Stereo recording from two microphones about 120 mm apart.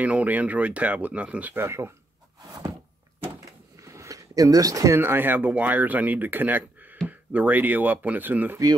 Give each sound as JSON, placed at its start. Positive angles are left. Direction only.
{"t": 0.0, "sound": "speech", "side_deg": -10}
{"t": 3.8, "sound": "speech", "side_deg": -25}